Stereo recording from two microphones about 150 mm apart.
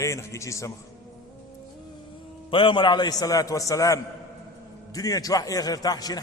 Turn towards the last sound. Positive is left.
turn(degrees=25)  # may be behind; listen again after turning